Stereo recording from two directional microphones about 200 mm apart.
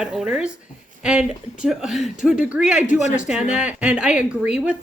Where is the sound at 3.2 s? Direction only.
5° right (ahead or behind).